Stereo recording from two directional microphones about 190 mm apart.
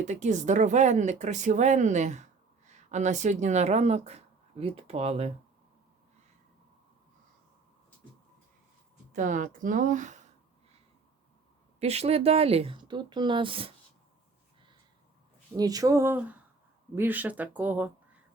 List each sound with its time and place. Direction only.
0.0 s a woman's voice: 40° right (ahead or behind)
9.1 s speech: 40° right (ahead or behind)
11.8 s a woman's voice: 35° right (ahead or behind)
15.5 s speech: 20° right (ahead or behind)